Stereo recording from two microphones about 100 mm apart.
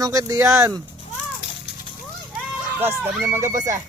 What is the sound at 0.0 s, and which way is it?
Speech, 35° right (ahead or behind).